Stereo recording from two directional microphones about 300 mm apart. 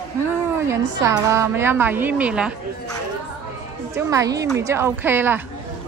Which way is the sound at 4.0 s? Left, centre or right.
Centre.